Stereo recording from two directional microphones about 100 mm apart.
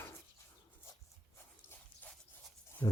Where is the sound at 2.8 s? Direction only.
35° left (ahead or behind).